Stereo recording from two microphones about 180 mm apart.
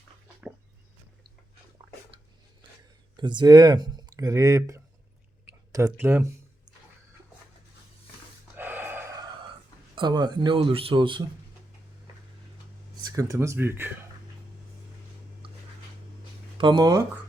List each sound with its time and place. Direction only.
3.2 s speech: 25° right (ahead or behind)
5.5 s a sound: 15° right (ahead or behind)
8.5 s gasp: 10° right (ahead or behind)
9.9 s speech: 25° right (ahead or behind)
13.1 s speech: 20° right (ahead or behind)
15.4 s a sound: 30° right (ahead or behind)
16.6 s speech: 25° right (ahead or behind)